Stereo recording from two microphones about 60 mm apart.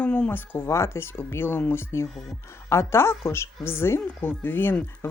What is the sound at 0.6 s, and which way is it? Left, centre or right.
Speech, left.